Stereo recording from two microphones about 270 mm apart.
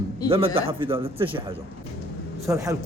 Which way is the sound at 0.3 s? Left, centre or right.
Right.